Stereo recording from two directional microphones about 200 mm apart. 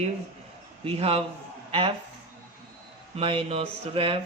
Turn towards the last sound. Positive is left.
turn(degrees=-30)  # may be behind; listen again after turning